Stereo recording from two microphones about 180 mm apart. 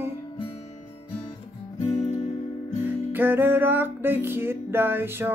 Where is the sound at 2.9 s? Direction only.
10° right (ahead or behind).